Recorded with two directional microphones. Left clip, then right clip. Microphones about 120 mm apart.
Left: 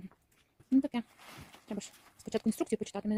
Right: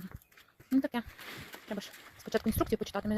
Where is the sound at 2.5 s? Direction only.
40° left (ahead or behind).